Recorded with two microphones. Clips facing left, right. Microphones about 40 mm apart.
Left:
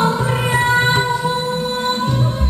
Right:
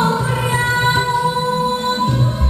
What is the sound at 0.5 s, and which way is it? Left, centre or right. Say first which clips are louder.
Music: left 3 dB; left.